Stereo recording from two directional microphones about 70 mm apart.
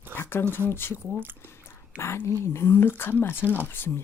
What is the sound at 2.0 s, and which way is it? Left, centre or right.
Speech, left.